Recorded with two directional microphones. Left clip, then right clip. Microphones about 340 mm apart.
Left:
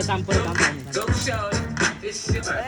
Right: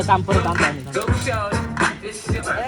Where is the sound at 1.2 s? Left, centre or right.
Centre.